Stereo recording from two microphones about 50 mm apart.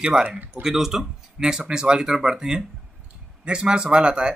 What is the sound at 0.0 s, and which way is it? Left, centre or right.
Speech, centre.